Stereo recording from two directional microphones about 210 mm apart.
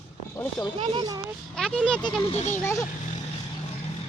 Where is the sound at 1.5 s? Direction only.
Centre (ahead or behind).